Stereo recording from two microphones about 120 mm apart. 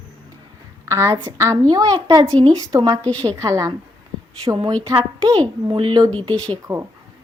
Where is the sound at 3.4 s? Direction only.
30° right (ahead or behind).